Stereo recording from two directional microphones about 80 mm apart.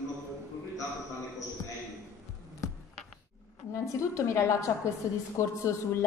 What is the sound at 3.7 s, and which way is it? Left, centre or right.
A woman's voice, left.